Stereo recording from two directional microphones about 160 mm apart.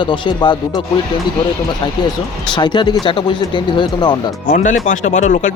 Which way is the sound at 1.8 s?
30° left (ahead or behind).